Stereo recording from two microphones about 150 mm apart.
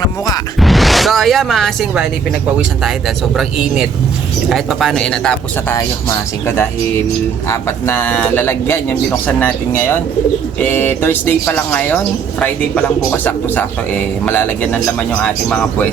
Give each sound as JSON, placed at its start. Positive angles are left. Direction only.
{"t": 0.6, "sound": "speech", "side_deg": 0}
{"t": 4.4, "sound": "speech", "side_deg": 0}
{"t": 5.7, "sound": "speech", "side_deg": 20}